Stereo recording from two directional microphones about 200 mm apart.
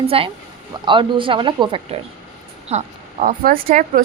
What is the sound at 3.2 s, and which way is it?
Speech, 45° right (ahead or behind).